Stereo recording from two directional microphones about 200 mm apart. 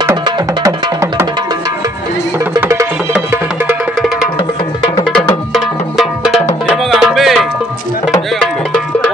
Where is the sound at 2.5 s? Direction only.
15° right (ahead or behind).